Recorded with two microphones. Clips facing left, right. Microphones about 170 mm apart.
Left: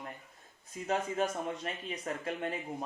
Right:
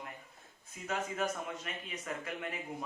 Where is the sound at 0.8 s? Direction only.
35° left (ahead or behind).